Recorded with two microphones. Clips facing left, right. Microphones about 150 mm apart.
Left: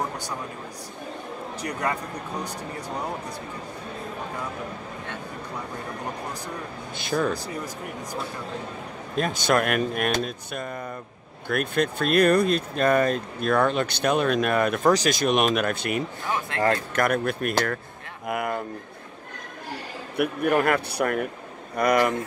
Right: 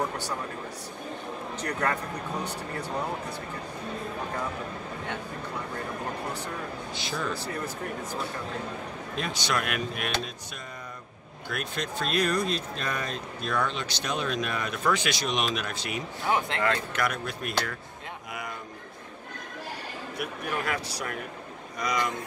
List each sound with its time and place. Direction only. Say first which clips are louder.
1.6 s speech: left 1 dB; 10° left (ahead or behind)
7.0 s speech: left 10 dB; 55° left (ahead or behind)
9.1 s speech: left 8 dB; 50° left (ahead or behind)
14.9 s speech: left 5 dB; 40° left (ahead or behind)
18.3 s a sound: left 12 dB; 55° left (ahead or behind)
20.2 s speech: left 11 dB; 60° left (ahead or behind)